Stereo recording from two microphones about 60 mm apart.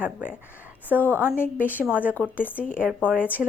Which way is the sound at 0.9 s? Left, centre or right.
Right.